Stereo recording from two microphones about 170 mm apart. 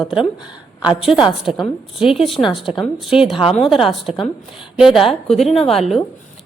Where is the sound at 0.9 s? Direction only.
5° right (ahead or behind).